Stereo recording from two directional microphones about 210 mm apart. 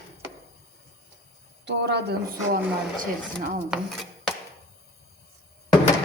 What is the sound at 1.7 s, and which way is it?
Speech, 55° right (ahead or behind).